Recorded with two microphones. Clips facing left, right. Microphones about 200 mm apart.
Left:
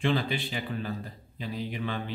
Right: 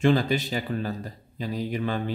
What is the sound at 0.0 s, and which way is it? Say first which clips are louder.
Speech: right 6 dB; 45° right (ahead or behind).